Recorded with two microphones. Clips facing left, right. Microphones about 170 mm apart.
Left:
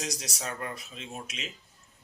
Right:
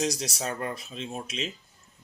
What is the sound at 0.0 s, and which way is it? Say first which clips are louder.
Speech: right 7 dB; 30° right (ahead or behind).